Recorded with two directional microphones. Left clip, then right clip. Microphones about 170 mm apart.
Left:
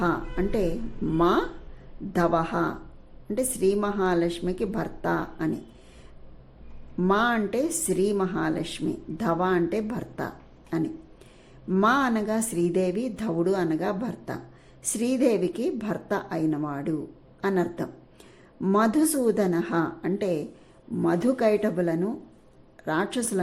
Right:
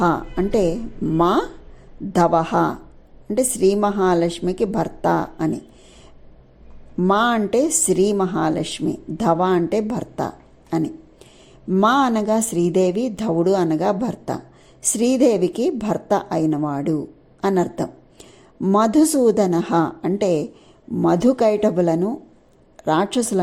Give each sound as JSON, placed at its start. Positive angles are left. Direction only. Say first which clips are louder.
{"t": 0.0, "sound": "speech", "louder": "right 7 dB", "side_deg": -25}
{"t": 6.9, "sound": "a woman's voice", "louder": "right 6 dB", "side_deg": -25}